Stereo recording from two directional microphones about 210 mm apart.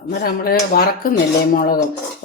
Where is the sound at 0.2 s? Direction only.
45° left (ahead or behind).